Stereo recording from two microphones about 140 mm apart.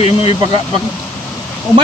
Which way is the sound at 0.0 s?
45° left (ahead or behind).